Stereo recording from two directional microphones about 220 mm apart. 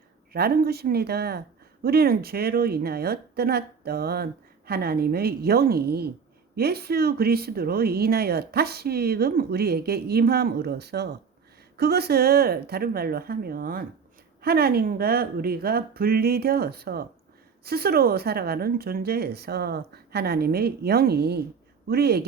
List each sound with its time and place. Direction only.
0.3 s speech: 45° right (ahead or behind)